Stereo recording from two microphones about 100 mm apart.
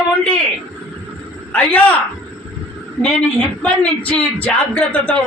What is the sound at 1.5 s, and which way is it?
Speech, 15° left (ahead or behind).